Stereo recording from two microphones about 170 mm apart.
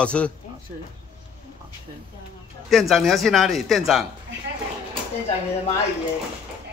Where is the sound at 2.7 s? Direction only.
Centre (ahead or behind).